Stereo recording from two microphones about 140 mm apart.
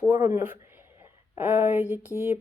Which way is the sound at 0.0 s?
20° right (ahead or behind).